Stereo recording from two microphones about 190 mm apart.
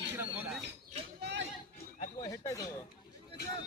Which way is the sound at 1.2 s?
70° right (ahead or behind).